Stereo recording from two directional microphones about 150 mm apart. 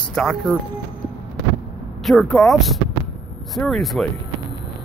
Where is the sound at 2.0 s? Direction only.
5° left (ahead or behind).